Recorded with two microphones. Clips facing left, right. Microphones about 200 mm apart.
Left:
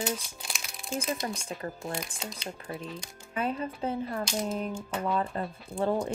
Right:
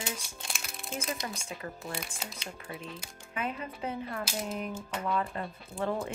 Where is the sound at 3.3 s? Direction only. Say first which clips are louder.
Left 5 dB; 35° left (ahead or behind).